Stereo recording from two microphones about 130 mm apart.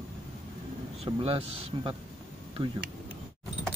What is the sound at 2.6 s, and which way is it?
Speech, 25° right (ahead or behind).